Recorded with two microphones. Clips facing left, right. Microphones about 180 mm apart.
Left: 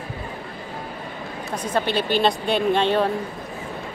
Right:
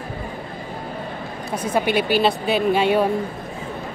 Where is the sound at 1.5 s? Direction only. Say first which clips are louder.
Right 3 dB; 10° right (ahead or behind).